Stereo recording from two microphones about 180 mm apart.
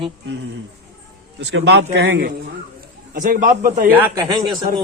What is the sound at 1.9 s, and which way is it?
Speech, 90° right.